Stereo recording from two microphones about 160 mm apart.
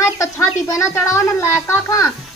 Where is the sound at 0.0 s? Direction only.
20° left (ahead or behind).